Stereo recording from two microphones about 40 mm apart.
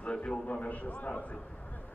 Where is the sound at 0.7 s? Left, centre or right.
Left.